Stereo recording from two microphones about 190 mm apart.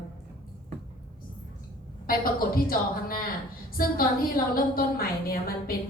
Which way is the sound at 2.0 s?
50° left (ahead or behind).